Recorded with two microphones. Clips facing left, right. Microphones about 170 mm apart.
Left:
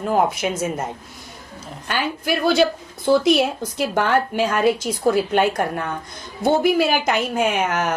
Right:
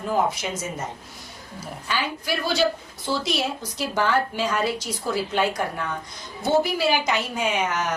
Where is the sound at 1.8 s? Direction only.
55° left (ahead or behind).